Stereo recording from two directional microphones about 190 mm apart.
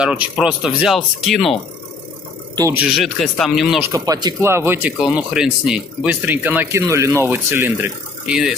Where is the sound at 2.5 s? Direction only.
20° right (ahead or behind).